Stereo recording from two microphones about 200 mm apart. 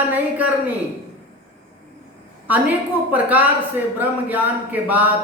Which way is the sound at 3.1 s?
10° right (ahead or behind).